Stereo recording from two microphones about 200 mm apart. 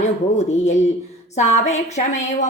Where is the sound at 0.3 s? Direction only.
35° left (ahead or behind).